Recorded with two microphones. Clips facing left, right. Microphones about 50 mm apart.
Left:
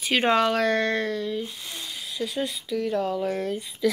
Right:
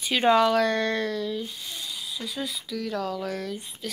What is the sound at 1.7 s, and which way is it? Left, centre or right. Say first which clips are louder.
Speech: even; left.